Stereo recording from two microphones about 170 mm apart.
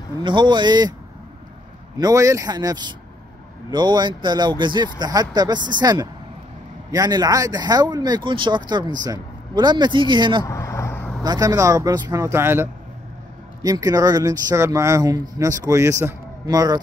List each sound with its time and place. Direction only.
0.2 s speech: 30° right (ahead or behind)
2.0 s speech: 20° right (ahead or behind)
10.4 s vehicle: 15° left (ahead or behind)
11.2 s speech: 20° right (ahead or behind)